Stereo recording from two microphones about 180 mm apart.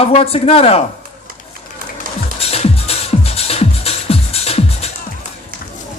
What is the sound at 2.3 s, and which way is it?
Music, 35° left (ahead or behind).